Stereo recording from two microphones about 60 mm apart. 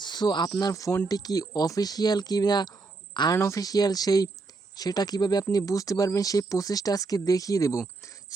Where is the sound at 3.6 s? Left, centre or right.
Left.